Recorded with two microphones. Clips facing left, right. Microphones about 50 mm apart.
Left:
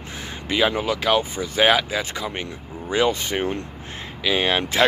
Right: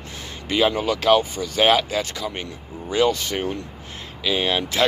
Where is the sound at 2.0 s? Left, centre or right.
Centre; by 4.9 s left.